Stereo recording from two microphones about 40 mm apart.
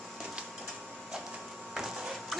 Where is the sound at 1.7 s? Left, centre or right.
Centre.